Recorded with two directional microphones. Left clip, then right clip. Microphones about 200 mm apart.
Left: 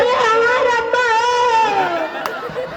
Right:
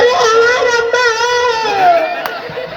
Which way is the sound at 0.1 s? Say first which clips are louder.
Right 4 dB; 50° left (ahead or behind).